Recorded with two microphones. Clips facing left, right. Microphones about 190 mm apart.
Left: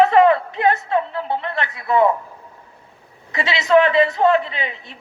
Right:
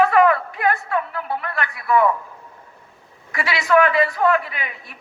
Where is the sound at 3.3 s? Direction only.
20° left (ahead or behind).